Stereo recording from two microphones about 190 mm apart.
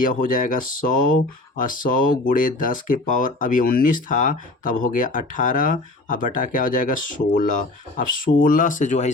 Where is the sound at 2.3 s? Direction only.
45° left (ahead or behind).